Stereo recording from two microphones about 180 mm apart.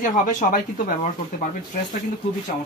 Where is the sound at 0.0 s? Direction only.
50° left (ahead or behind).